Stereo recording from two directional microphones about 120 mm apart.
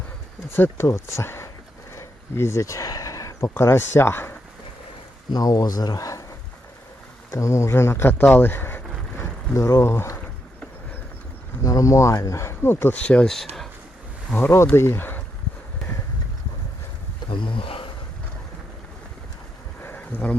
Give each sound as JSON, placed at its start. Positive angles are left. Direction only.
{"t": 0.5, "sound": "speech", "side_deg": 20}
{"t": 5.3, "sound": "speech", "side_deg": 30}
{"t": 7.3, "sound": "speech", "side_deg": 25}
{"t": 11.6, "sound": "speech", "side_deg": 30}
{"t": 14.3, "sound": "speech", "side_deg": 20}
{"t": 17.2, "sound": "wild animals", "side_deg": 45}
{"t": 19.8, "sound": "a sound", "side_deg": 15}